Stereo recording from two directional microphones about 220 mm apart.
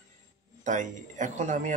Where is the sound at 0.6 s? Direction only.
35° right (ahead or behind).